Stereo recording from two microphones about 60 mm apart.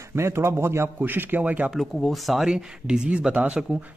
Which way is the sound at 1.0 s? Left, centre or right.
Right.